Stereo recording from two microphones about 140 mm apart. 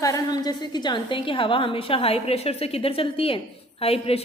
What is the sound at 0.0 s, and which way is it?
A woman's voice, 25° left (ahead or behind).